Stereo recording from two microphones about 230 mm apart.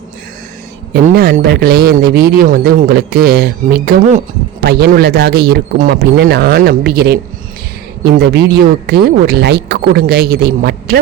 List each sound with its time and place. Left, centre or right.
0.9 s speech: right